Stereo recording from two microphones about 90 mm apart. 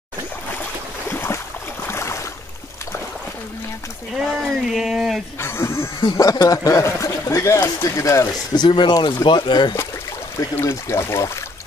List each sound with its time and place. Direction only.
1.0 s boat: 25° left (ahead or behind)
1.9 s a sound: 30° left (ahead or behind)
4.2 s speech: 5° right (ahead or behind)
5.4 s a sound: 30° left (ahead or behind)
6.1 s speech: 40° left (ahead or behind)
8.5 s speech: 55° left (ahead or behind)
10.5 s speech: 30° left (ahead or behind)